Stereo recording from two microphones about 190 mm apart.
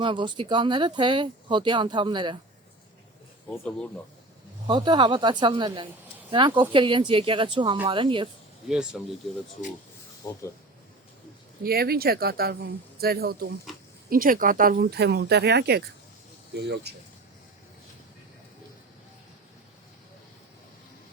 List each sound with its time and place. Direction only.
0.0 s speech: 25° right (ahead or behind)
3.5 s speech: 10° left (ahead or behind)
4.6 s speech: 25° right (ahead or behind)
8.7 s speech: 5° right (ahead or behind)
10.2 s speech: 20° left (ahead or behind)
11.6 s speech: 50° right (ahead or behind)